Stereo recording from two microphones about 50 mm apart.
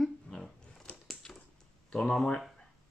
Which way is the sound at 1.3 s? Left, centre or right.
Centre.